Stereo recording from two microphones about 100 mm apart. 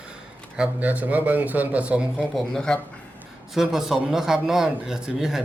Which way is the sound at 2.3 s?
5° left (ahead or behind).